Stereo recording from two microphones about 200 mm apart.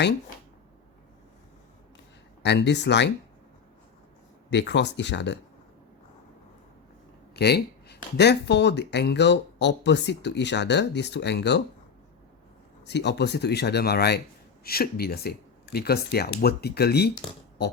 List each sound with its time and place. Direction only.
2.4 s speech: 60° left (ahead or behind)
4.5 s speech: 60° left (ahead or behind)
7.3 s a sound: 55° left (ahead or behind)
8.1 s speech: 55° left (ahead or behind)
12.9 s speech: 60° left (ahead or behind)